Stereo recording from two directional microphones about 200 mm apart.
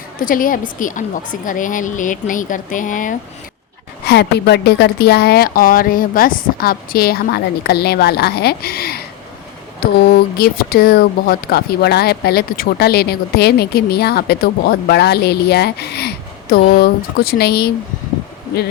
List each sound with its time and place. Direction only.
0.2 s a woman's voice: 45° left (ahead or behind)
4.0 s speech: 55° left (ahead or behind)
10.3 s speech: 50° left (ahead or behind)